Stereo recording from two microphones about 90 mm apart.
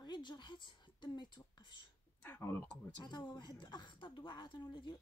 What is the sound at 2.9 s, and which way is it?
Speech, 55° left (ahead or behind).